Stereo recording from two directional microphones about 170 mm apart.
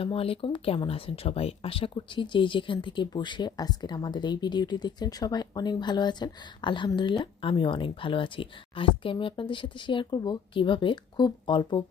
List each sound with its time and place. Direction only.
0.0 s speech: 35° left (ahead or behind)